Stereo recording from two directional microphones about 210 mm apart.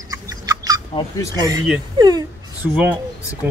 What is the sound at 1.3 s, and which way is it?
Speech, 20° right (ahead or behind).